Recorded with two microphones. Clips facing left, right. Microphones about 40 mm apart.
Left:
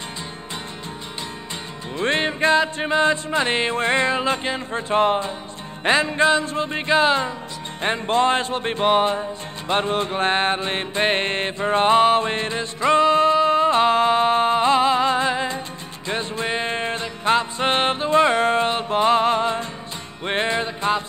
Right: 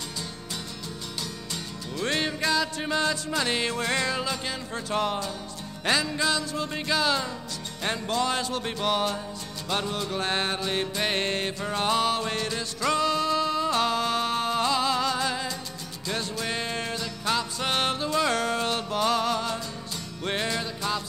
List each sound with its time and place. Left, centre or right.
2.0 s music: left